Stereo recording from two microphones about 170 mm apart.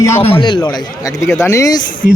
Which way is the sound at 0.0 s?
15° left (ahead or behind).